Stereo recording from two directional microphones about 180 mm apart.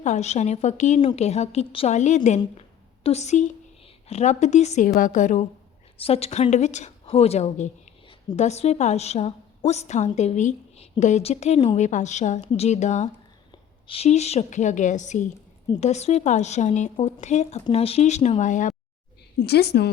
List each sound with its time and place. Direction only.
0.0 s a woman's voice: 40° left (ahead or behind)
2.6 s a sound: 35° left (ahead or behind)
4.1 s a woman's voice: 40° left (ahead or behind)
6.0 s a woman's voice: 35° left (ahead or behind)
19.4 s a woman's voice: 65° left (ahead or behind)